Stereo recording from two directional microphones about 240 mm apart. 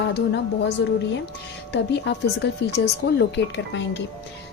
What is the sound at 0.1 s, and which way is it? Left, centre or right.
A woman's voice, left.